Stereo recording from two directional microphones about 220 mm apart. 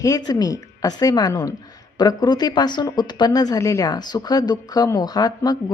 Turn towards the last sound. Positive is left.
turn(degrees=15)  # may be behind; listen again after turning